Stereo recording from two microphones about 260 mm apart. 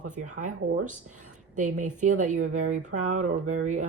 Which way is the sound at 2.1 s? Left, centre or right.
Right.